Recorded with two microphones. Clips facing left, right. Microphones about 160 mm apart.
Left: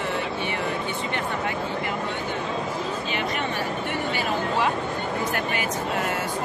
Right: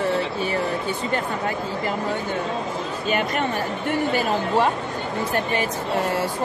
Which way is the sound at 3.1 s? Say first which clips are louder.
Right 8 dB; 50° right (ahead or behind).